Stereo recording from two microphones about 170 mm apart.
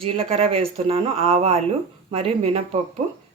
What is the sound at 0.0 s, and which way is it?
Speech, 35° right (ahead or behind).